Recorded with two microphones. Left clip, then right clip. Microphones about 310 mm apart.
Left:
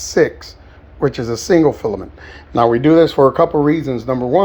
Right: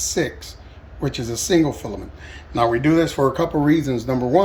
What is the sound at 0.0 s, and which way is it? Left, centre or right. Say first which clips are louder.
Speech: left 8 dB; centre.